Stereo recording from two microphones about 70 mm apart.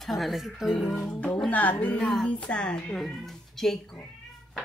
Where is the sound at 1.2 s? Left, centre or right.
Centre.